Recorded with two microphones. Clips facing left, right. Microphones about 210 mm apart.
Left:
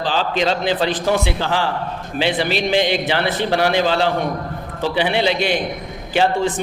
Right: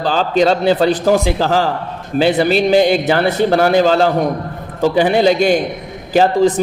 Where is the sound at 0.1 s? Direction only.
45° right (ahead or behind).